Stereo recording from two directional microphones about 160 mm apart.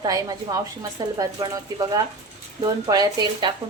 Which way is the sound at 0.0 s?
25° right (ahead or behind).